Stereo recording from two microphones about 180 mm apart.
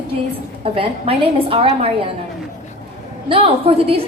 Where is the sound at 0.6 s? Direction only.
30° right (ahead or behind).